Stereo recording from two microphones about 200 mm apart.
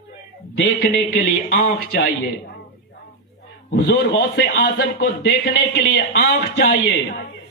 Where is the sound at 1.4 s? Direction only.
65° left (ahead or behind).